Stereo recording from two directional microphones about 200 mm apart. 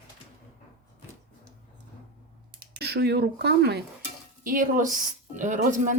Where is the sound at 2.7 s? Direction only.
55° right (ahead or behind).